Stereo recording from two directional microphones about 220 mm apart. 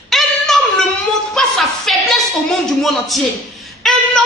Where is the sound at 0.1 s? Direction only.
Centre (ahead or behind).